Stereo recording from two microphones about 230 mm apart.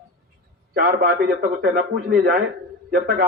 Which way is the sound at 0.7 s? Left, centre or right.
Right.